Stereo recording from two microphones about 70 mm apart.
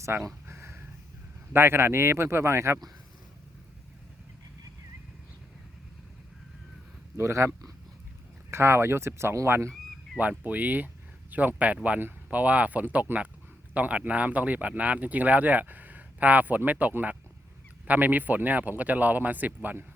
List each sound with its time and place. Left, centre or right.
0.0 s speech: right
0.4 s a sound: right
1.5 s speech: right
7.2 s speech: right
10.2 s speech: right